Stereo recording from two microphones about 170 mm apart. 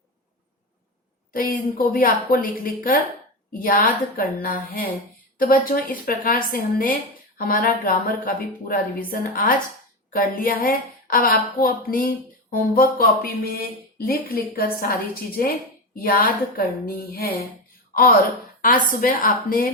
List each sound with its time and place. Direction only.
1.3 s a woman's voice: 55° left (ahead or behind)